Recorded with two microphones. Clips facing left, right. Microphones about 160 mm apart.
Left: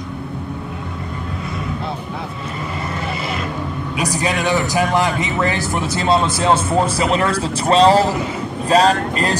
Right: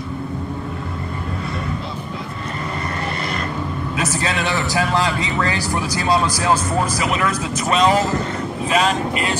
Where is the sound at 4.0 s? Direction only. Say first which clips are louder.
Left 3 dB; 15° left (ahead or behind).